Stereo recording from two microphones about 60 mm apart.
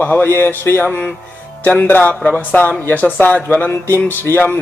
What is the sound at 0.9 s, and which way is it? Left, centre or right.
Speech, left.